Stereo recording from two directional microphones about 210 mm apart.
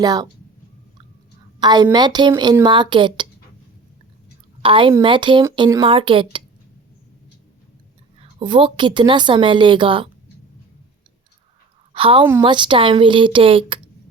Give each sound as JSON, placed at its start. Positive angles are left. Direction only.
{"t": 0.0, "sound": "a woman's voice", "side_deg": -20}
{"t": 1.5, "sound": "a woman's voice", "side_deg": -20}
{"t": 4.6, "sound": "a woman's voice", "side_deg": -25}
{"t": 8.2, "sound": "a woman's voice", "side_deg": -25}
{"t": 11.9, "sound": "a woman's voice", "side_deg": -25}